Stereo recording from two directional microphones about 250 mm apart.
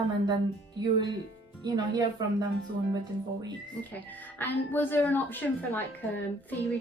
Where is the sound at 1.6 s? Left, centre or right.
Centre.